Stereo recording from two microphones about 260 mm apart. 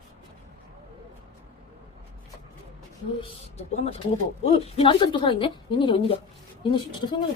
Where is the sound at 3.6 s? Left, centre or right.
Left.